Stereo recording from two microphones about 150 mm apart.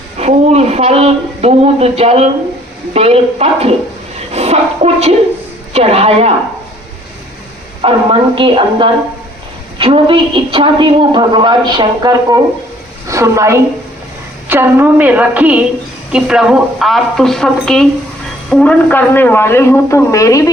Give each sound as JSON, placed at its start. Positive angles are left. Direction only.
{"t": 0.2, "sound": "speech", "side_deg": -45}
{"t": 7.8, "sound": "a woman's voice", "side_deg": -40}